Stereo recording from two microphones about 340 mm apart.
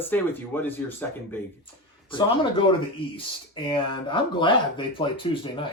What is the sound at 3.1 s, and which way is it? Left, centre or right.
Speech, centre.